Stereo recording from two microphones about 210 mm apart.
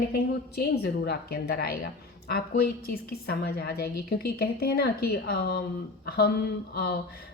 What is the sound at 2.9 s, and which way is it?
A woman's voice, 45° left (ahead or behind).